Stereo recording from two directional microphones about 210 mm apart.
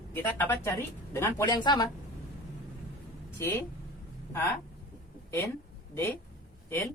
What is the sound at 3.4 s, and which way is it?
Speech, 10° left (ahead or behind).